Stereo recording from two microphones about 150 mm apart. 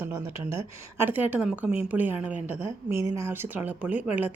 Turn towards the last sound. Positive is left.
turn(degrees=-10)  # may be behind; listen again after turning